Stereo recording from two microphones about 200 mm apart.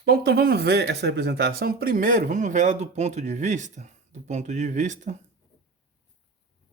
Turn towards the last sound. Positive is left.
turn(degrees=-35)  # may be behind; listen again after turning